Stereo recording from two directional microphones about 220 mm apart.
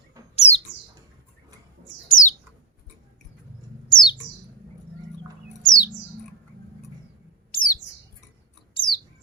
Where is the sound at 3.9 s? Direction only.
20° left (ahead or behind).